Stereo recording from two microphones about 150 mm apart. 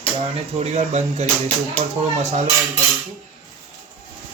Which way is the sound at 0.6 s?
45° right (ahead or behind).